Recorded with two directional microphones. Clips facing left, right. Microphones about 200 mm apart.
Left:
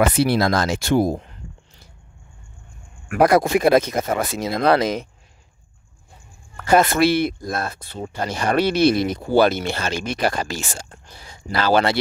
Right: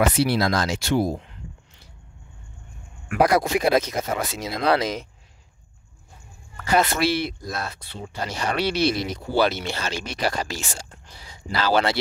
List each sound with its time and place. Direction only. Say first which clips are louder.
0.0 s speech: left 3 dB; 55° left (ahead or behind)
3.3 s speech: left 6 dB; 50° left (ahead or behind)
6.5 s speech: left 5 dB; 50° left (ahead or behind)